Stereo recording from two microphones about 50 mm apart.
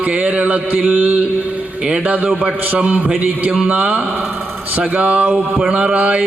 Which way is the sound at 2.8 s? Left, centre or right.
Right.